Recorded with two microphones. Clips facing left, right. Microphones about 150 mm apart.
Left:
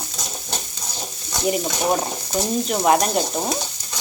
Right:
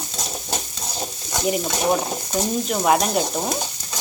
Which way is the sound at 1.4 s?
Centre (ahead or behind).